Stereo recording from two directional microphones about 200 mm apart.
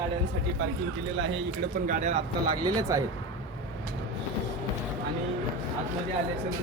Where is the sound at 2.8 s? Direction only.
15° right (ahead or behind).